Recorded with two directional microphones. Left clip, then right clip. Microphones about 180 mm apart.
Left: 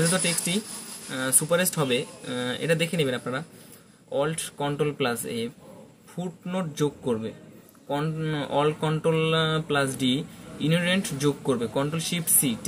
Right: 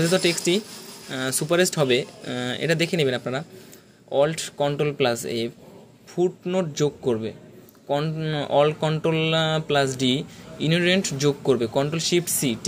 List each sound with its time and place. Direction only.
0.1 s speech: 45° right (ahead or behind)